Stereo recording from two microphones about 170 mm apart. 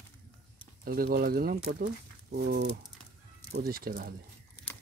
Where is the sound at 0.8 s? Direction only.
60° right (ahead or behind).